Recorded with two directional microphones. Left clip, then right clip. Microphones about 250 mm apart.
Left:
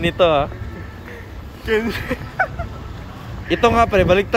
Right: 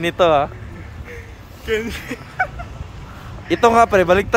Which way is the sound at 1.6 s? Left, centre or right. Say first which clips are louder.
Left 2 dB; centre.